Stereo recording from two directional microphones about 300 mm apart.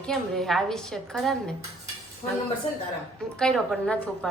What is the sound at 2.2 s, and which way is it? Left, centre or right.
Speech, centre.